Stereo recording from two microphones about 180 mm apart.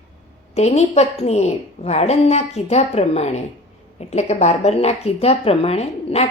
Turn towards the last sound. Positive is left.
turn(degrees=35)  # may be behind; listen again after turning